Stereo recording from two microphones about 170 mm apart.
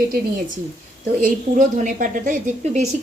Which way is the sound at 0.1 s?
50° right (ahead or behind).